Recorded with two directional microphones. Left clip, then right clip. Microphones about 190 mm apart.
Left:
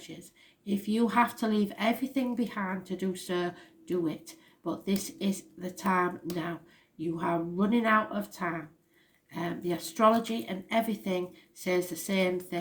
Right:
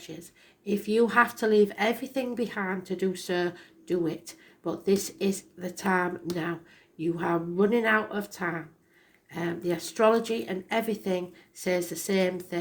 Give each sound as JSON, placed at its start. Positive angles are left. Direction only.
{"t": 0.6, "sound": "speech", "side_deg": -35}
{"t": 6.3, "sound": "speech", "side_deg": 5}
{"t": 7.2, "sound": "speech", "side_deg": -35}